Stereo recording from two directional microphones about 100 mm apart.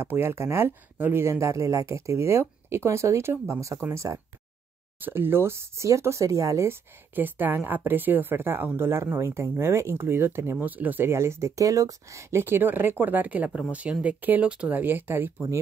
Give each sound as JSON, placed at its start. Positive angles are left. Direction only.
{"t": 0.0, "sound": "speech", "side_deg": -25}